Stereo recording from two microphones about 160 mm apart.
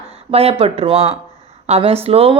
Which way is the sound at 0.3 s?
35° right (ahead or behind).